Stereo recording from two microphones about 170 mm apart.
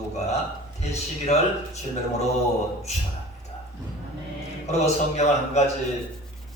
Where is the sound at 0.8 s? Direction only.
40° left (ahead or behind).